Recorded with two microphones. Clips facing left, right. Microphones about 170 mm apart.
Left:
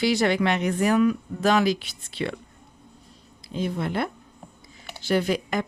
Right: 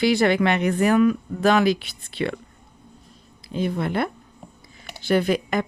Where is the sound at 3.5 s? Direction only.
55° right (ahead or behind).